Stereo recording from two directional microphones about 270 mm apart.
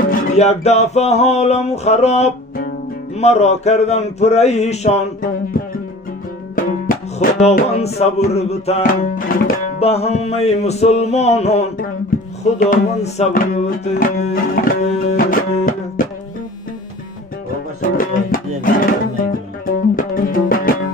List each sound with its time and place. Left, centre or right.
0.1 s music: left
17.8 s music: left